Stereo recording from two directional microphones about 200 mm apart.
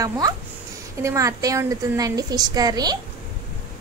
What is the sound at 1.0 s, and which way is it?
A woman's voice, 15° right (ahead or behind).